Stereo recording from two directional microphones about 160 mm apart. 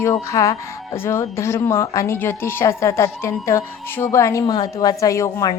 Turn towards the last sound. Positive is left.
turn(degrees=20)  # may be behind; listen again after turning